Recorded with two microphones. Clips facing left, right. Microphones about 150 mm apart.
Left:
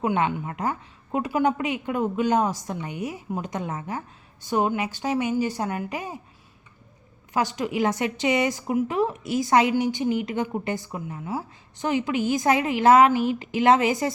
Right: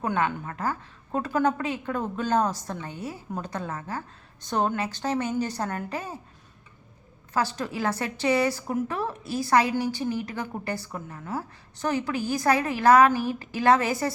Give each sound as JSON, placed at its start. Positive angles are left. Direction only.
{"t": 0.0, "sound": "a woman's voice", "side_deg": 20}
{"t": 7.3, "sound": "a woman's voice", "side_deg": 15}